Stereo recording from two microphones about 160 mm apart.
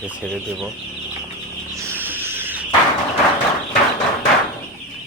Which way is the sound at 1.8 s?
15° right (ahead or behind).